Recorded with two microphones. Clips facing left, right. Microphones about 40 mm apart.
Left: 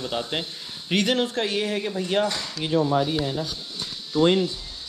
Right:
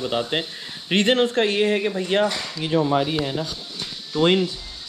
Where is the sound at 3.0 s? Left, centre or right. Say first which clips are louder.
Right 1 dB; right.